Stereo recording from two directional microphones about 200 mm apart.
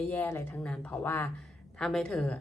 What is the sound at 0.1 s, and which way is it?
A woman's voice, 10° left (ahead or behind).